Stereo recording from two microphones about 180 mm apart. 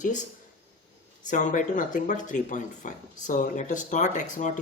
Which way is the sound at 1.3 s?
45° left (ahead or behind).